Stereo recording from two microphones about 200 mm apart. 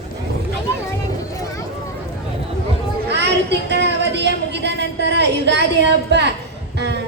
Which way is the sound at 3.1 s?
60° right (ahead or behind).